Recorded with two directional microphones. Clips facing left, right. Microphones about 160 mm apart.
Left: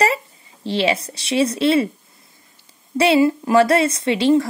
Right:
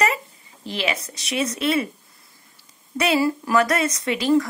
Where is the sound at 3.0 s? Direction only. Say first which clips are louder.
Left 5 dB; 25° left (ahead or behind).